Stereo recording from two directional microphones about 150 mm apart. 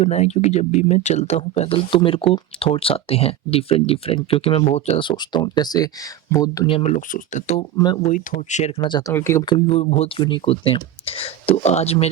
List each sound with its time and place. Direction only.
0.0 s speech: 50° left (ahead or behind)
5.0 s speech: 30° left (ahead or behind)
6.7 s speech: 40° left (ahead or behind)
6.9 s speech: 55° left (ahead or behind)
8.8 s speech: 30° left (ahead or behind)
9.1 s speech: 20° left (ahead or behind)
9.5 s speech: 40° left (ahead or behind)